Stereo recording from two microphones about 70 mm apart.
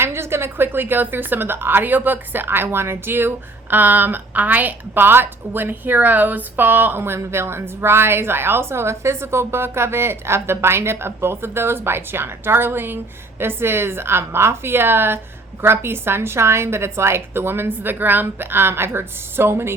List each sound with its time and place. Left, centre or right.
0.0 s a woman's voice: right